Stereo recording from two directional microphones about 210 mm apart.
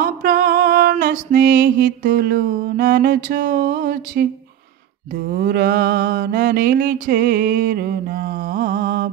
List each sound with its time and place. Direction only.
0.0 s music: 40° right (ahead or behind)
3.3 s mantra: 40° right (ahead or behind)
5.3 s mantra: 40° right (ahead or behind)